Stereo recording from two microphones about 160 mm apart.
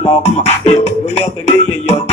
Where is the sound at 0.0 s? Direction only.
40° left (ahead or behind).